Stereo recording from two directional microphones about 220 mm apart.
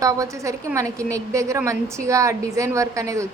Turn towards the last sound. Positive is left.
turn(degrees=-15)  # may be behind; listen again after turning